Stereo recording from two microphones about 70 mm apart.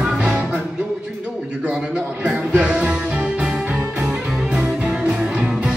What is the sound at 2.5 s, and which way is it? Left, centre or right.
Music, centre.